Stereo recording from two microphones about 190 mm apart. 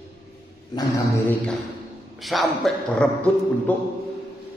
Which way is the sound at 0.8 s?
15° left (ahead or behind).